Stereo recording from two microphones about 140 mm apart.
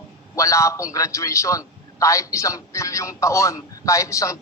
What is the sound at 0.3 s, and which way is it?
A man's voice, 20° left (ahead or behind).